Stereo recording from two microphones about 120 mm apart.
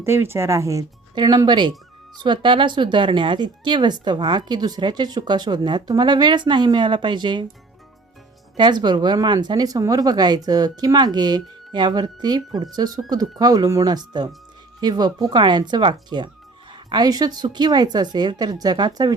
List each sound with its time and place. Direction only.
0.0 s speech: 20° right (ahead or behind)
1.1 s speech: 35° right (ahead or behind)
8.5 s speech: 35° right (ahead or behind)